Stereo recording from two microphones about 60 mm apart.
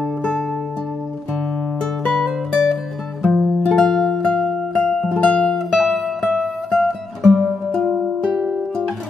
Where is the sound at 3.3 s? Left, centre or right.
Centre.